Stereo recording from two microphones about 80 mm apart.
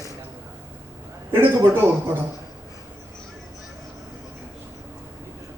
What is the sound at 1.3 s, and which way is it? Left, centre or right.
Speech, right.